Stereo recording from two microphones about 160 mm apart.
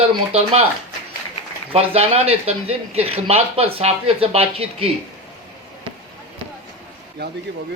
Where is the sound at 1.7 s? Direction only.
35° right (ahead or behind).